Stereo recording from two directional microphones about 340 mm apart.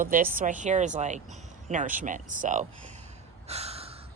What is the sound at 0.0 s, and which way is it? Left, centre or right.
Speech, right.